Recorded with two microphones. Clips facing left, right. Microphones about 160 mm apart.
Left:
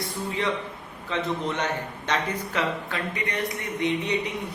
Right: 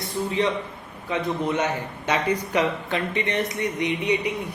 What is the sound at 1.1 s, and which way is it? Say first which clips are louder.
A man's voice: right 3 dB; 10° right (ahead or behind).